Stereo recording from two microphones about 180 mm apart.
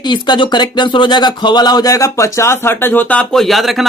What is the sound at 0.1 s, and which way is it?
Speech, 25° left (ahead or behind).